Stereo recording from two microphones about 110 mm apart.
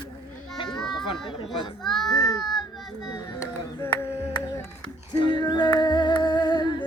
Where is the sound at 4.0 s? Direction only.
25° left (ahead or behind).